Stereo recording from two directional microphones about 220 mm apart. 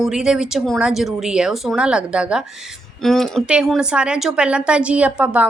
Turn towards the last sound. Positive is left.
turn(degrees=-5)  # may be behind; listen again after turning